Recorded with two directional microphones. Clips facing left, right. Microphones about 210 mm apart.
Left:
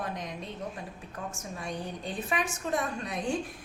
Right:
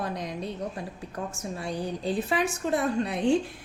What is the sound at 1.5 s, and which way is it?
A woman's voice, 35° right (ahead or behind).